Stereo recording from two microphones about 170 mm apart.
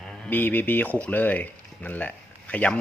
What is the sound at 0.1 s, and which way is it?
Speech, 10° left (ahead or behind).